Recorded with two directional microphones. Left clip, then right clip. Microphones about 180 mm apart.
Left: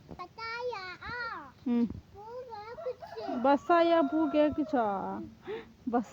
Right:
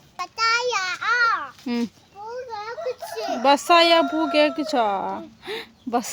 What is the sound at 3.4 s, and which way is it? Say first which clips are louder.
Speech: right 9 dB; 10° right (ahead or behind).